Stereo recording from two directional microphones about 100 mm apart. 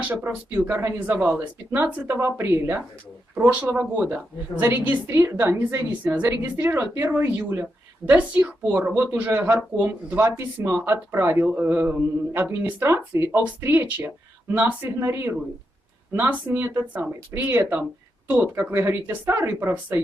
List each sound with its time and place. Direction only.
0.0 s speech: 20° right (ahead or behind)